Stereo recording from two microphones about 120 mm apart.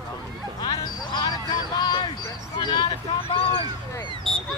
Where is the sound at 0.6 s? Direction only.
35° left (ahead or behind).